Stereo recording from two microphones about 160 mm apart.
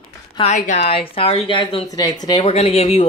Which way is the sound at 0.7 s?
80° left.